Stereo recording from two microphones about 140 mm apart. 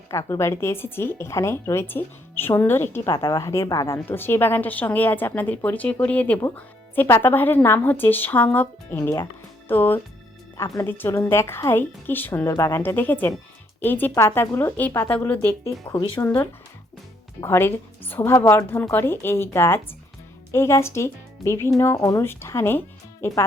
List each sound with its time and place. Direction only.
0.1 s speech: 20° left (ahead or behind)
16.0 s speech: 35° left (ahead or behind)
16.2 s speech: 15° left (ahead or behind)